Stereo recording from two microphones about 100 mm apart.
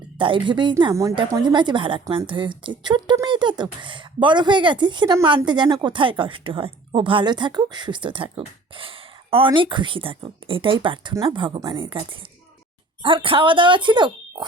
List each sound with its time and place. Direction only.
0.2 s a woman's voice: 55° right (ahead or behind)
9.5 s a woman's voice: 50° right (ahead or behind)
11.1 s speech: 35° right (ahead or behind)
11.3 s a woman's voice: 55° right (ahead or behind)